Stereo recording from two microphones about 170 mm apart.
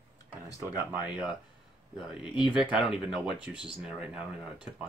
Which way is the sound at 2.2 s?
30° left (ahead or behind).